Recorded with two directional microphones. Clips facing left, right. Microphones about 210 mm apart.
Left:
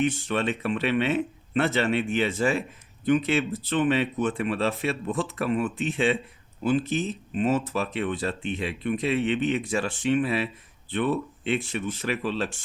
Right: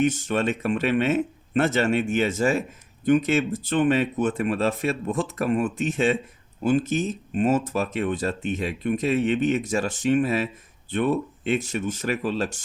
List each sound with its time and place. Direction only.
0.0 s speech: 45° right (ahead or behind)